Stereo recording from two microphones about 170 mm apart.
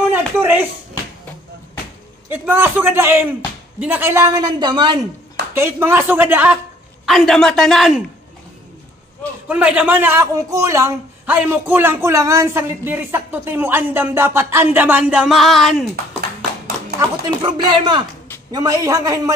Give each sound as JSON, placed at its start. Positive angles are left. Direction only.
{"t": 0.1, "sound": "a sound", "side_deg": -10}
{"t": 2.2, "sound": "a man's voice", "side_deg": -10}
{"t": 5.5, "sound": "a man's voice", "side_deg": -15}
{"t": 7.1, "sound": "a man's voice", "side_deg": 0}
{"t": 9.5, "sound": "a man's voice", "side_deg": -10}
{"t": 17.4, "sound": "a man's voice", "side_deg": -25}